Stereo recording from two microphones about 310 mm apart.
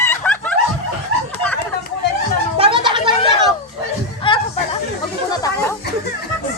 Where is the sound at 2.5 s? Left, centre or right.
Centre.